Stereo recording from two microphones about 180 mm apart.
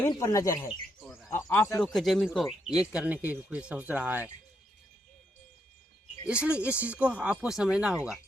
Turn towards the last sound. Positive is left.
turn(degrees=-5)  # may be behind; listen again after turning